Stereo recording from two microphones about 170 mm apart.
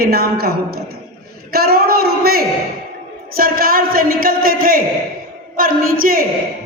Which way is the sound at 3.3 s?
60° right (ahead or behind).